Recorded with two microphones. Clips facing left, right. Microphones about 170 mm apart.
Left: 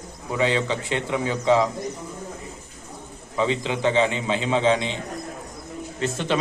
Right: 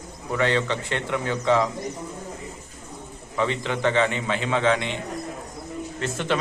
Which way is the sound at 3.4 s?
15° left (ahead or behind).